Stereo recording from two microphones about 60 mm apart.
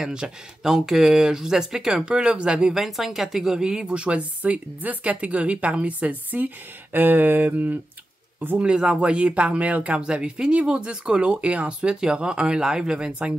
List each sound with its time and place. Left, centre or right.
0.0 s speech: centre
2.8 s speech: centre; by 7.8 s right
8.5 s speech: centre